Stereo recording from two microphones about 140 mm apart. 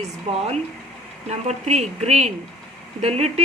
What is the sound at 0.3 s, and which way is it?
Speech, 45° right (ahead or behind).